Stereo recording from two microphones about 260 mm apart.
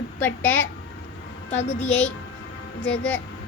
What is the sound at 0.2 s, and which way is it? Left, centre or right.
Speech, centre.